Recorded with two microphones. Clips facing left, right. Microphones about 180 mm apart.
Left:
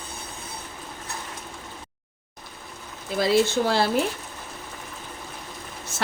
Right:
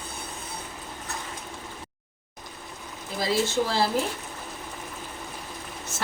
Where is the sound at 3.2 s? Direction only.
65° left (ahead or behind).